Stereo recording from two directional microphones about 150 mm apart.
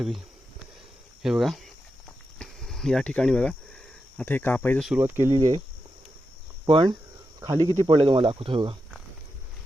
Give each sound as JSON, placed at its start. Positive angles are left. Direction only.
{"t": 1.2, "sound": "speech", "side_deg": 0}
{"t": 4.9, "sound": "speech", "side_deg": -15}
{"t": 6.7, "sound": "speech", "side_deg": -35}
{"t": 7.3, "sound": "speech", "side_deg": -25}